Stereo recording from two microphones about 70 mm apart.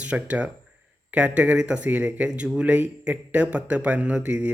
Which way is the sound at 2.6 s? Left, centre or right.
Right.